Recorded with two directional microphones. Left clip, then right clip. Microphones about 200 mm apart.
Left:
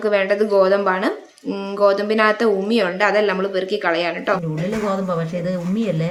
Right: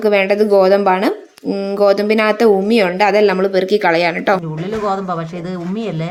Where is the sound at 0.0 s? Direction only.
20° right (ahead or behind).